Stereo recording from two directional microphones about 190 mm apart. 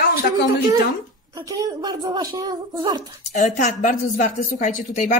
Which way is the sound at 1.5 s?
20° right (ahead or behind).